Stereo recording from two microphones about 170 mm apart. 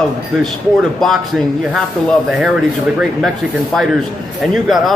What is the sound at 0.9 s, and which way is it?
Speech, centre (ahead or behind).